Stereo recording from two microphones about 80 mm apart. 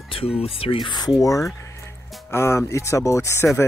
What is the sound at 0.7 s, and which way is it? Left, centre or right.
Speech, left.